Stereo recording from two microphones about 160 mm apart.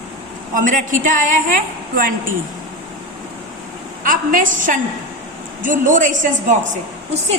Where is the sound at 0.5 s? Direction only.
55° right (ahead or behind).